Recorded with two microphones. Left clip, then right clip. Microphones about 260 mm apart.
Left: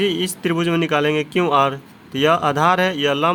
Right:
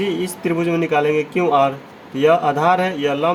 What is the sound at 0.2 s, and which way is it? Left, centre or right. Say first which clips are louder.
A man's voice: even; left.